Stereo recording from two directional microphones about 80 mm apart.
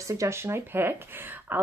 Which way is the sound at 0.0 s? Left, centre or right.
Right.